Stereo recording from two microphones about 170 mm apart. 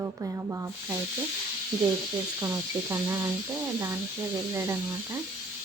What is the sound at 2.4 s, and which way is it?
Speech, 20° right (ahead or behind).